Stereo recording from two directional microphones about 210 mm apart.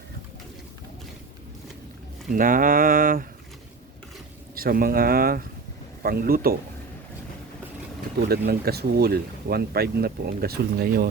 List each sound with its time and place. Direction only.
2.3 s a sound: 40° right (ahead or behind)
4.5 s speech: 45° right (ahead or behind)
8.3 s speech: 50° right (ahead or behind)